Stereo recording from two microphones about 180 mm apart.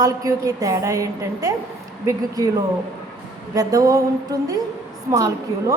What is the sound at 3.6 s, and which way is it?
A woman's voice, 20° right (ahead or behind).